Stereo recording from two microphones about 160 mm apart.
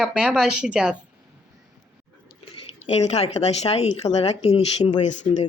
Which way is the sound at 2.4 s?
40° left (ahead or behind).